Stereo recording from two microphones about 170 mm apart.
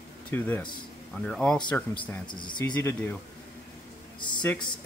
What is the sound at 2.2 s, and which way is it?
Speech, 25° left (ahead or behind).